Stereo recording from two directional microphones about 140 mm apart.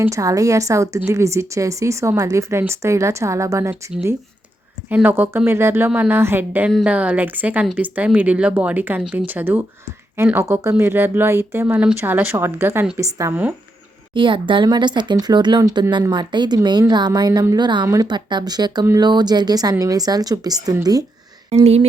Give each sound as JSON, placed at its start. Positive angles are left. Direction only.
{"t": 0.0, "sound": "a woman's voice", "side_deg": -25}
{"t": 4.9, "sound": "a woman's voice", "side_deg": -15}
{"t": 14.1, "sound": "a woman's voice", "side_deg": -35}
{"t": 21.5, "sound": "speech", "side_deg": -45}